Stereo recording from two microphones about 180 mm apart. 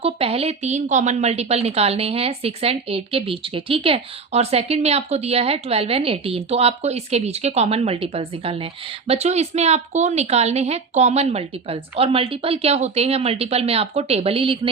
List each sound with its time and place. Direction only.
0.0 s a woman's voice: 35° right (ahead or behind)